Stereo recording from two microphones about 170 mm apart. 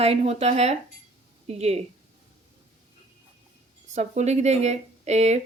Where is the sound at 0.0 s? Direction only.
35° right (ahead or behind).